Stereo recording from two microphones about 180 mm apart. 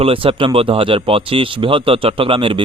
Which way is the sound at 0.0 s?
30° right (ahead or behind).